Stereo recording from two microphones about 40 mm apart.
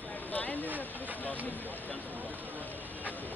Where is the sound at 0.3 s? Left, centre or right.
Left.